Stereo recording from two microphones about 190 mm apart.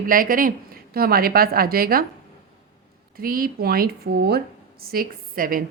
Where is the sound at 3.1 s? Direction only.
50° right (ahead or behind).